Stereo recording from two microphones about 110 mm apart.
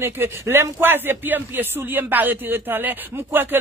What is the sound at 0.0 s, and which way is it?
Speech, 20° right (ahead or behind).